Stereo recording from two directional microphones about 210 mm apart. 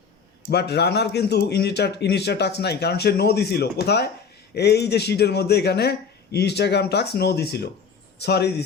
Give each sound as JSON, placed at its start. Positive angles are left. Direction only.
{"t": 0.5, "sound": "speech", "side_deg": 50}